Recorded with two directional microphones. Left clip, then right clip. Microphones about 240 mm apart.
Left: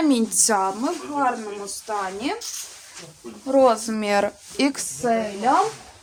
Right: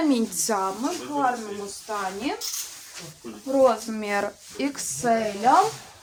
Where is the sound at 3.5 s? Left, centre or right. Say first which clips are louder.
Left 3 dB; left.